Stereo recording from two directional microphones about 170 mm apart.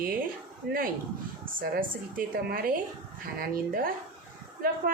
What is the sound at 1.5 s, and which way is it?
A woman's voice, 60° right (ahead or behind).